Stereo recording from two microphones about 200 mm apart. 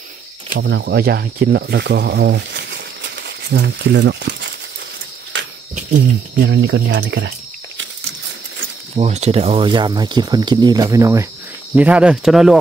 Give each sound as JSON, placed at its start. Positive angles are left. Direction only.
{"t": 0.6, "sound": "speech", "side_deg": -60}
{"t": 5.3, "sound": "a sound", "side_deg": -65}
{"t": 5.8, "sound": "speech", "side_deg": -40}
{"t": 6.4, "sound": "speech", "side_deg": -60}
{"t": 8.9, "sound": "speech", "side_deg": -35}